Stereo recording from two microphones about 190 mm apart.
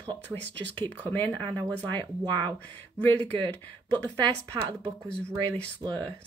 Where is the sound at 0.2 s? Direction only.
10° left (ahead or behind).